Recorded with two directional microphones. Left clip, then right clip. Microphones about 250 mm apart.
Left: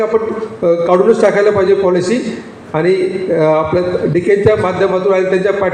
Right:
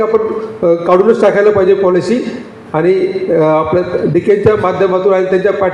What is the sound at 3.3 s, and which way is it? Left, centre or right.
A man's voice, right.